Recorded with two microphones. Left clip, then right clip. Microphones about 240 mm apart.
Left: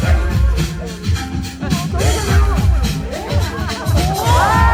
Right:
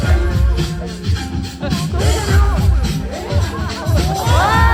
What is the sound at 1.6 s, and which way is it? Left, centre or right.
Music, left.